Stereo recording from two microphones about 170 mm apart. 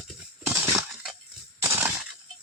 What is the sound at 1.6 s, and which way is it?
Breaking, 15° right (ahead or behind).